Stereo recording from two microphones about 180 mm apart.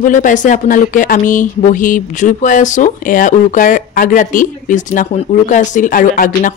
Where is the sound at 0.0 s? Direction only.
45° left (ahead or behind).